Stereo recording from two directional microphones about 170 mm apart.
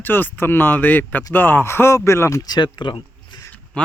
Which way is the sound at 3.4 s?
10° left (ahead or behind).